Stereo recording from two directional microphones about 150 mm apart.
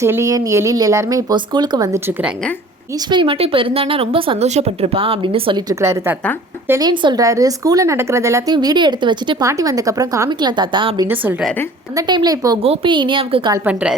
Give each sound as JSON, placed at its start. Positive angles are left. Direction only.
{"t": 0.0, "sound": "speech", "side_deg": -20}
{"t": 3.1, "sound": "speech", "side_deg": -35}
{"t": 5.8, "sound": "a woman's voice", "side_deg": -20}
{"t": 8.5, "sound": "speech", "side_deg": -30}
{"t": 11.0, "sound": "a woman's voice", "side_deg": -15}
{"t": 11.9, "sound": "speech", "side_deg": -30}
{"t": 12.6, "sound": "speech", "side_deg": -40}